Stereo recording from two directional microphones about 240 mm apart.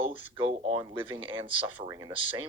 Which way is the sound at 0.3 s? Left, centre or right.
Right.